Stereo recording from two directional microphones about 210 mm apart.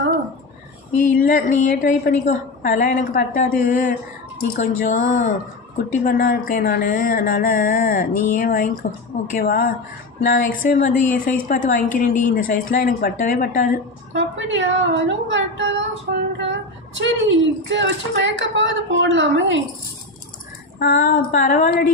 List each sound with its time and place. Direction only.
0.9 s a woman's voice: 40° left (ahead or behind)
14.1 s speech: 60° right (ahead or behind)
20.7 s a woman's voice: 45° left (ahead or behind)